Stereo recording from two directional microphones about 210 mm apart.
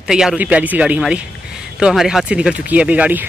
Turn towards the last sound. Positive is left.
turn(degrees=-10)  # may be behind; listen again after turning